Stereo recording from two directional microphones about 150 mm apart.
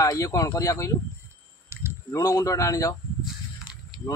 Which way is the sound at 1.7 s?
15° right (ahead or behind).